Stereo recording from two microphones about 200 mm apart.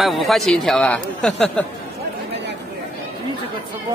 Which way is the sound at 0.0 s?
Centre (ahead or behind).